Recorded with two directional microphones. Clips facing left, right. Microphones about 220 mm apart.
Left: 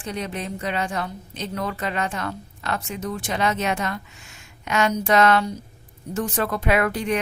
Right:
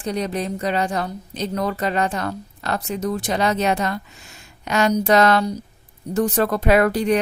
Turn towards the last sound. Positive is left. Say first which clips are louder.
# right 5 dB
turn(degrees=-35)  # may be behind; listen again after turning